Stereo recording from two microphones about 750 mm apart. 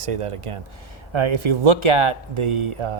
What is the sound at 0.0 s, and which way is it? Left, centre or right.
Speech, right.